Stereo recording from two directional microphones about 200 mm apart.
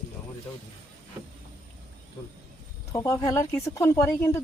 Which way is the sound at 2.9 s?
15° left (ahead or behind).